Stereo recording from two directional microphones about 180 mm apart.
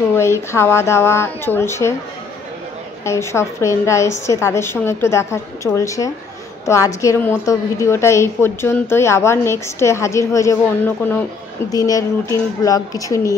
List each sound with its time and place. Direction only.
0.1 s a woman's voice: 15° left (ahead or behind)
3.1 s a woman's voice: 15° left (ahead or behind)